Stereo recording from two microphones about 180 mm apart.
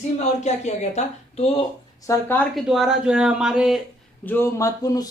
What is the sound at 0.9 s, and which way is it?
Speech, 35° left (ahead or behind).